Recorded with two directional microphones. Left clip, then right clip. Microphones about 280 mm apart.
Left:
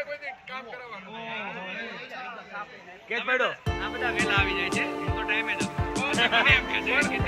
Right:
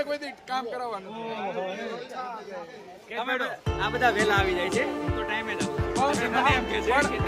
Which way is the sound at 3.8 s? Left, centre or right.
Right.